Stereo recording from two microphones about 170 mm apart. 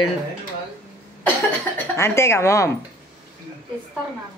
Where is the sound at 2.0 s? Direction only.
15° left (ahead or behind).